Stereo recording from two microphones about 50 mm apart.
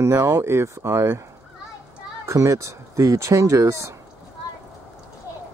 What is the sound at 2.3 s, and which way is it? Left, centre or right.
Speech, right.